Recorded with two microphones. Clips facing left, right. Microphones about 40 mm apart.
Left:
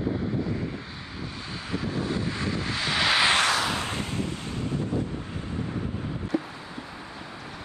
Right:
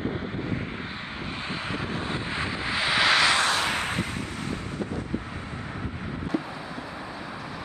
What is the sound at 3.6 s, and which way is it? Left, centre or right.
Wind noise, right.